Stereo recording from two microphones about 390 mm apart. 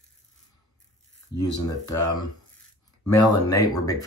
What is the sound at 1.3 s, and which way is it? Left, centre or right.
Speech, left.